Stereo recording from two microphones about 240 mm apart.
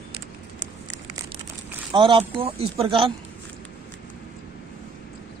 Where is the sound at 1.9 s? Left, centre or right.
Right.